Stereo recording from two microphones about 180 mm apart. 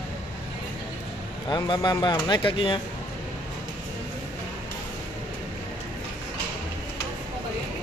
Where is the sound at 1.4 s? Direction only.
25° left (ahead or behind).